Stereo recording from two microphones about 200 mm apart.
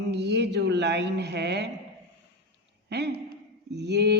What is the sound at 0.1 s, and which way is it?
A man's voice, 60° right (ahead or behind).